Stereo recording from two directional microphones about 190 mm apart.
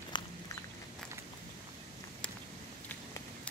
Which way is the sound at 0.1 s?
25° left (ahead or behind).